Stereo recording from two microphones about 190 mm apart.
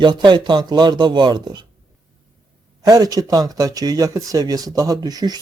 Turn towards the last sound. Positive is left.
turn(degrees=-20)  # may be behind; listen again after turning